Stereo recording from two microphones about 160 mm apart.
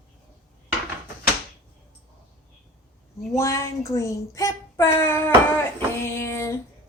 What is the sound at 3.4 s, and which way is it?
A woman's voice, 20° left (ahead or behind).